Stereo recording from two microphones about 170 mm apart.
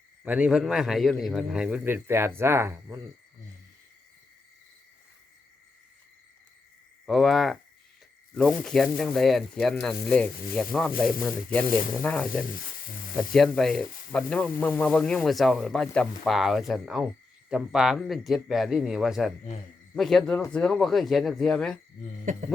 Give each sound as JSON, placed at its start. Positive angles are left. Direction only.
{"t": 0.3, "sound": "a man's voice", "side_deg": -5}
{"t": 7.0, "sound": "speech", "side_deg": 0}
{"t": 11.6, "sound": "speech", "side_deg": 55}
{"t": 12.0, "sound": "speech", "side_deg": 10}